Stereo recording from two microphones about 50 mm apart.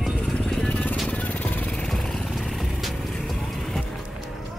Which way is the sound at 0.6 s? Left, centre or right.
Left.